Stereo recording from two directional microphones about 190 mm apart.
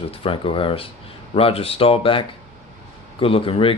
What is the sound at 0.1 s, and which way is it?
Speech, 30° left (ahead or behind).